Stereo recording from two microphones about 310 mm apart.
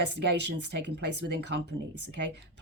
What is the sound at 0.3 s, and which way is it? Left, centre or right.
Speech, right.